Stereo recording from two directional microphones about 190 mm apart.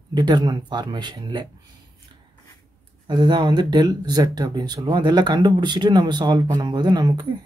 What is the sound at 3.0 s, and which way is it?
Speech, 25° right (ahead or behind).